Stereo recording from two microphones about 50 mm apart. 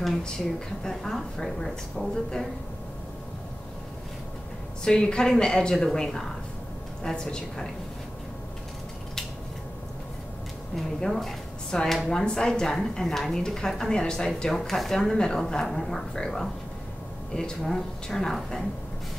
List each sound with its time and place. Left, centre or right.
0.8 s a woman's voice: centre
4.8 s a woman's voice: centre
10.8 s a woman's voice: centre
12.3 s a woman's voice: centre